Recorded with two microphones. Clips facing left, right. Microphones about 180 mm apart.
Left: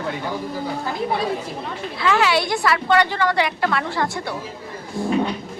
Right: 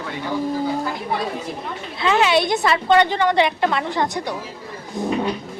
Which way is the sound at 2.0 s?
20° right (ahead or behind).